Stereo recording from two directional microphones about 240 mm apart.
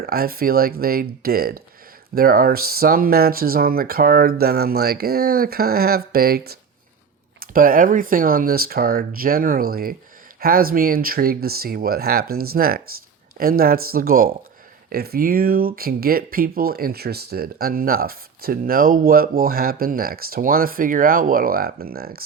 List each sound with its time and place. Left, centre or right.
0.0 s speech: right